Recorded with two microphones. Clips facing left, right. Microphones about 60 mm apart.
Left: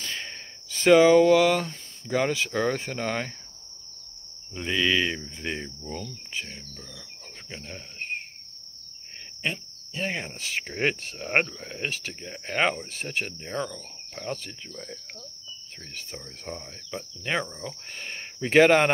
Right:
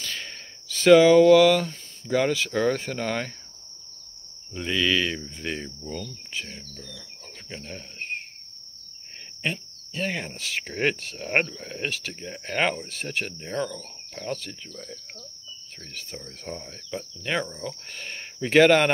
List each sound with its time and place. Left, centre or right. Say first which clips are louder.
0.2 s a sound: left 1 dB; left
1.7 s speech: right 2 dB; centre
4.6 s cricket: even; left
5.2 s speech: right 1 dB; centre
5.9 s cricket: right 1 dB; left
7.6 s speech: even; centre
9.5 s speech: right 1 dB; centre
12.6 s speech: even; centre
13.4 s speech: right 2 dB; centre
16.2 s speech: right 2 dB; centre